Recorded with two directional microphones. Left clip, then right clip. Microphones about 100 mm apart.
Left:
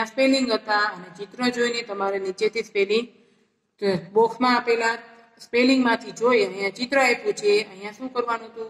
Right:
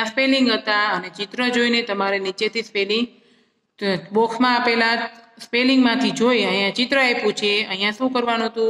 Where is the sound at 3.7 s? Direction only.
45° right (ahead or behind).